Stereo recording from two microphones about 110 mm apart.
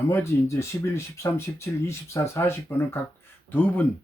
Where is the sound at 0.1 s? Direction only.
25° left (ahead or behind).